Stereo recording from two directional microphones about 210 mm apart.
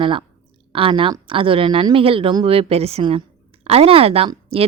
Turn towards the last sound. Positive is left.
turn(degrees=-25)  # may be behind; listen again after turning